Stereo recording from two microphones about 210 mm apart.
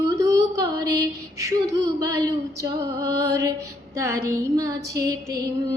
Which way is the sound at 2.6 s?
15° right (ahead or behind).